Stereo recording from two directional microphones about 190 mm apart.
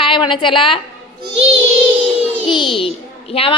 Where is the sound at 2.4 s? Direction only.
25° left (ahead or behind).